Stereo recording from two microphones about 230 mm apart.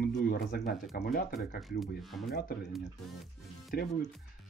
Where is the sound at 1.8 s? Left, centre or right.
Centre.